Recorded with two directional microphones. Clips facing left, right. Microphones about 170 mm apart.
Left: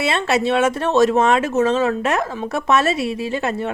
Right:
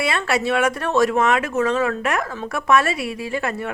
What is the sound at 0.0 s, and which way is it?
Speech, 25° left (ahead or behind).